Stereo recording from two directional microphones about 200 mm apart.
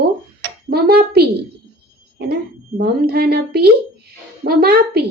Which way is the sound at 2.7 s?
55° right (ahead or behind).